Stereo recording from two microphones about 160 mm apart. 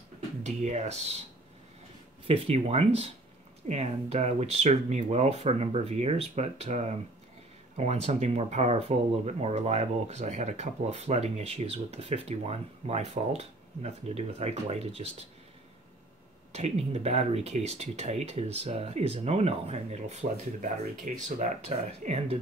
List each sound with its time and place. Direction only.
0.4 s speech: 45° right (ahead or behind)
2.2 s speech: 40° right (ahead or behind)
16.5 s speech: 40° right (ahead or behind)